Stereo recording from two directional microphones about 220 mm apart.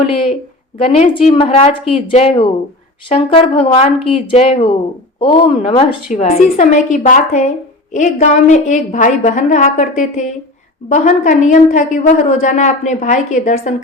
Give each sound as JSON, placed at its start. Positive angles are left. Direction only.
{"t": 0.9, "sound": "a woman's voice", "side_deg": 30}